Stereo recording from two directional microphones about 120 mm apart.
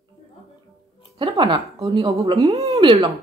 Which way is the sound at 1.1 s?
45° right (ahead or behind).